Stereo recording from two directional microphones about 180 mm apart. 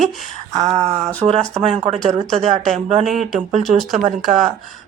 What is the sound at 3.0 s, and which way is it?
Speech, centre (ahead or behind).